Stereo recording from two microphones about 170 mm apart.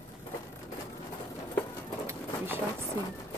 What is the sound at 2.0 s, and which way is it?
Pigeon, 15° right (ahead or behind).